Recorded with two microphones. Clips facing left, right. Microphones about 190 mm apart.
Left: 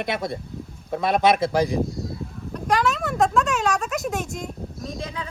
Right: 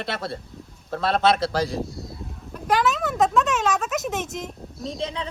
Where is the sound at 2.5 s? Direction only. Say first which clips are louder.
Even; centre (ahead or behind).